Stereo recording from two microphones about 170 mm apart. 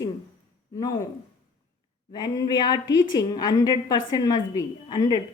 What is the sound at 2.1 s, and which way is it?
A woman's voice, 25° left (ahead or behind).